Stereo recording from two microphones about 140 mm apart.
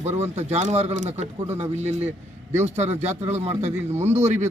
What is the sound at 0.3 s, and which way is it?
Speech, 50° right (ahead or behind).